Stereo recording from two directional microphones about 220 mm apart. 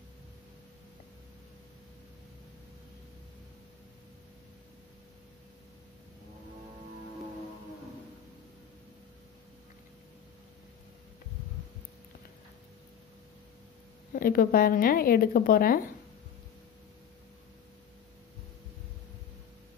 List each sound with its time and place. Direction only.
14.1 s speech: 40° left (ahead or behind)